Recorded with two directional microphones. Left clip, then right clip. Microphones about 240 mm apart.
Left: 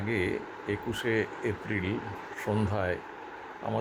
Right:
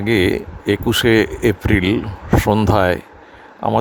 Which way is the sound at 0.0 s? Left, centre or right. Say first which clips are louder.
Right 14 dB; right.